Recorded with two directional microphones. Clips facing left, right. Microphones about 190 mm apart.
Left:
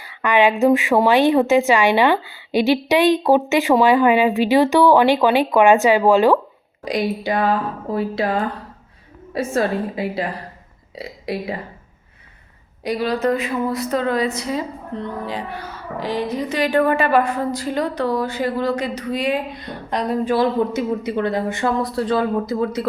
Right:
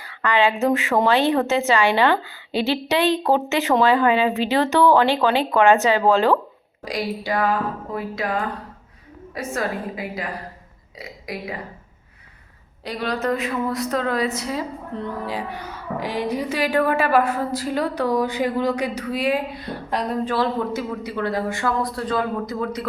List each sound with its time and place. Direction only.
0.0 s a woman's voice: 15° left (ahead or behind)
12.8 s a woman's voice: 10° left (ahead or behind)
20.2 s speech: 15° left (ahead or behind); by 22.9 s 30° left (ahead or behind)